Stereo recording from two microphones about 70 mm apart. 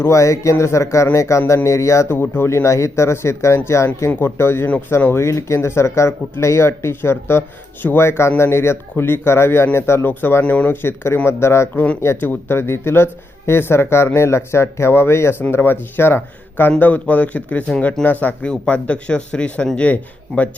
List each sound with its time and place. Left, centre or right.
0.0 s speech: left
2.3 s speech: left
10.8 s speech: left
11.7 s speech: left
12.5 s speech: left; by 18.0 s centre
18.0 s speech: left